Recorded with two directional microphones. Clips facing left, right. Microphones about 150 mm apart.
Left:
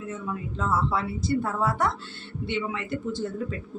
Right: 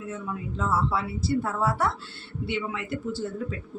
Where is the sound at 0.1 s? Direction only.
5° right (ahead or behind).